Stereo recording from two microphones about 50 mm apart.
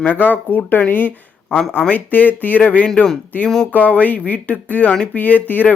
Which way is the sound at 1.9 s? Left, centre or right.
Left.